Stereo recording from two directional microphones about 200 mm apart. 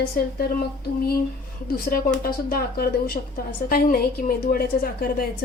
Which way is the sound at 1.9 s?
45° left (ahead or behind).